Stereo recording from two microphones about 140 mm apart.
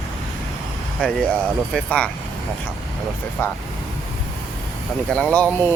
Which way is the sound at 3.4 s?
15° left (ahead or behind).